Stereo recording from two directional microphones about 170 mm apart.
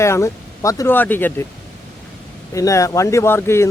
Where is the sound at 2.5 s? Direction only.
20° left (ahead or behind).